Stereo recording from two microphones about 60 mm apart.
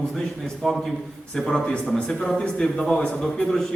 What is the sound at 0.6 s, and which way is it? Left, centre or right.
A man's voice, centre.